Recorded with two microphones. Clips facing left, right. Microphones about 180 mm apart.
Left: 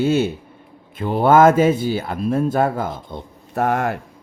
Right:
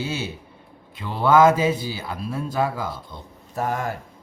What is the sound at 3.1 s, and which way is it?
Speech, 65° left (ahead or behind).